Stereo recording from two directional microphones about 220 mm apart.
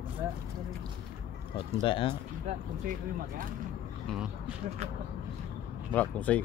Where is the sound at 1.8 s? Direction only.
25° left (ahead or behind).